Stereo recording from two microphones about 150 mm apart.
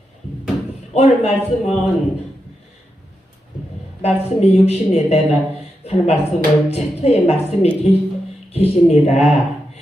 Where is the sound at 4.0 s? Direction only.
45° left (ahead or behind).